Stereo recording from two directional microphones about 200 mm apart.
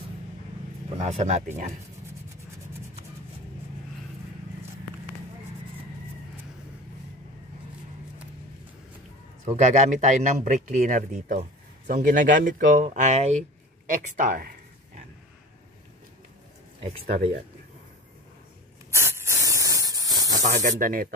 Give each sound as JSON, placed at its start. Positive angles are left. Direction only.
{"t": 0.9, "sound": "speech", "side_deg": -35}
{"t": 9.4, "sound": "speech", "side_deg": -40}
{"t": 16.8, "sound": "speech", "side_deg": -30}
{"t": 18.9, "sound": "spray", "side_deg": -10}
{"t": 20.4, "sound": "speech", "side_deg": -40}